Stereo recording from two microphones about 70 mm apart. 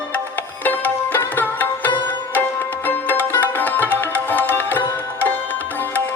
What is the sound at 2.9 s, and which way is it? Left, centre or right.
Music, left.